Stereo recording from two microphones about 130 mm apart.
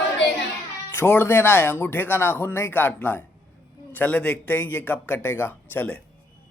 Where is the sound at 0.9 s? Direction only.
15° left (ahead or behind).